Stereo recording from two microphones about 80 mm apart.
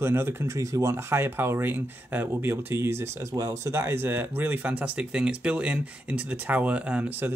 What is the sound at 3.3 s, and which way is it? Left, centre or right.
Speech, right.